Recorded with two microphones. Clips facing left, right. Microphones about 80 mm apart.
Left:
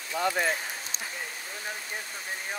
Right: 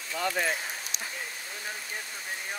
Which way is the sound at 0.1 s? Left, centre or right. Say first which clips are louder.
Left 2 dB; centre.